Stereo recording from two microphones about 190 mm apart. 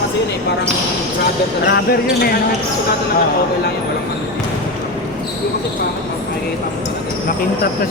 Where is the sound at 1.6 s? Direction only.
60° left (ahead or behind).